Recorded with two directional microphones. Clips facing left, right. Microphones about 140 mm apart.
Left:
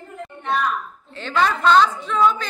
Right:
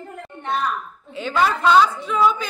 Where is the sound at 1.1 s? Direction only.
10° right (ahead or behind).